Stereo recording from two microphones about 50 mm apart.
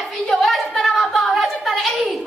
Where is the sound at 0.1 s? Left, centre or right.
Centre.